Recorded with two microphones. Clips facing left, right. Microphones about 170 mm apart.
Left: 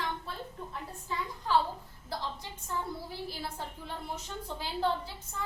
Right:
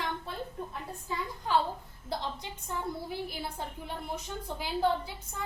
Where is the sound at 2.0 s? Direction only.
20° right (ahead or behind).